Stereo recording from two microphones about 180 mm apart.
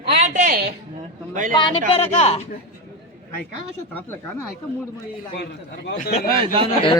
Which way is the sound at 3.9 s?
15° left (ahead or behind).